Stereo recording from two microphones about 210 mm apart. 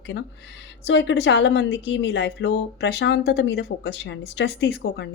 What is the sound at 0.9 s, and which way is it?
Speech, 55° left (ahead or behind).